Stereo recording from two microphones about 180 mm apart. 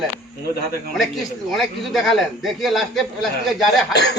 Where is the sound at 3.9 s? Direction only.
70° left (ahead or behind).